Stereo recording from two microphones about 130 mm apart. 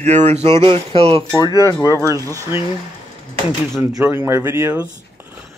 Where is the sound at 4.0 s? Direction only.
20° right (ahead or behind).